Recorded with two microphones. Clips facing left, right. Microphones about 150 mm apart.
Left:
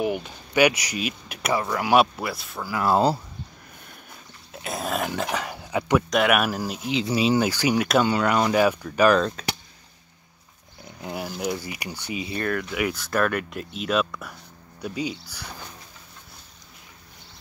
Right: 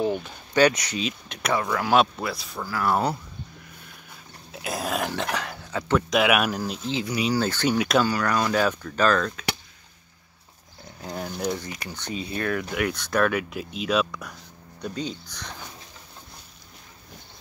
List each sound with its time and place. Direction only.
0.0 s speech: 15° left (ahead or behind)
2.7 s speech: 25° left (ahead or behind)
4.5 s speech: centre (ahead or behind)
6.0 s speech: centre (ahead or behind); by 7.4 s 25° left (ahead or behind)
7.4 s speech: 10° left (ahead or behind)
8.0 s speech: 20° left (ahead or behind)
11.0 s speech: 10° left (ahead or behind)